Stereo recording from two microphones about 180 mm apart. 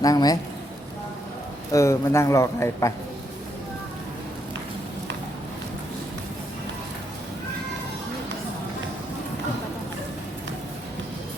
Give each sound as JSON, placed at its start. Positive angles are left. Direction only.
{"t": 0.0, "sound": "a man's voice", "side_deg": 20}
{"t": 1.7, "sound": "speech", "side_deg": 15}